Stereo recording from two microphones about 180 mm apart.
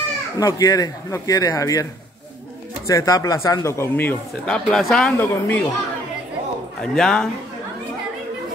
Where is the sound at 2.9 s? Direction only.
20° left (ahead or behind).